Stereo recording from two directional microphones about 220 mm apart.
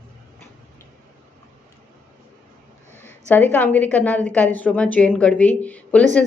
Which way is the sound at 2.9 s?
30° right (ahead or behind).